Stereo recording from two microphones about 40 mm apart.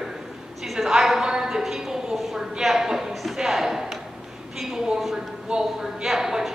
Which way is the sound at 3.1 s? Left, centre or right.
Centre.